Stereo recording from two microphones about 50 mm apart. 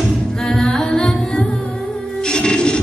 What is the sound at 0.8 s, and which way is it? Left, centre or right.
Singing, centre.